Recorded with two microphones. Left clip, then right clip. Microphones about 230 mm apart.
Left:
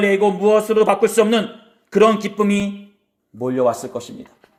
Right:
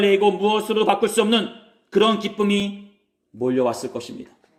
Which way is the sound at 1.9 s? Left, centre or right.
Centre.